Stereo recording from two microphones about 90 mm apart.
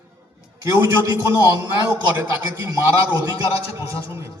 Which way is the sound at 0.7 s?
40° right (ahead or behind).